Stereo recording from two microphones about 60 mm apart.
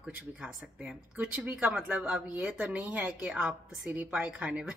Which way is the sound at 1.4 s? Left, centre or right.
Right.